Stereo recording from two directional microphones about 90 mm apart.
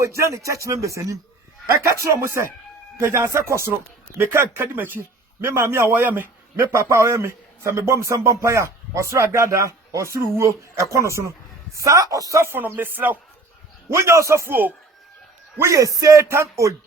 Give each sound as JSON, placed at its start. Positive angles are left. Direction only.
{"t": 0.0, "sound": "a man's voice", "side_deg": -35}
{"t": 13.9, "sound": "a man's voice", "side_deg": -30}